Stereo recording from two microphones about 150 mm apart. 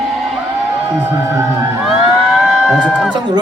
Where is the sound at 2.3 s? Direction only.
5° right (ahead or behind).